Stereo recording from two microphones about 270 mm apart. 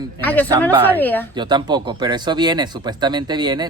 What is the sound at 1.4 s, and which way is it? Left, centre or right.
Speech, centre.